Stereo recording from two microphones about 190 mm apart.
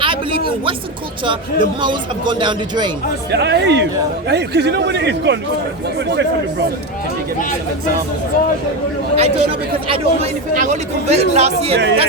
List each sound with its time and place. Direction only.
0.0 s a sound: 25° right (ahead or behind)
1.2 s a man's voice: 25° right (ahead or behind)
3.3 s speech: 65° right (ahead or behind)
9.1 s speech: 30° right (ahead or behind)
11.7 s speech: 65° right (ahead or behind)